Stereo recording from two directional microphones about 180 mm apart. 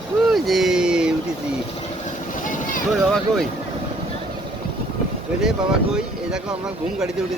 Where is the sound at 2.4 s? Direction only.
45° left (ahead or behind).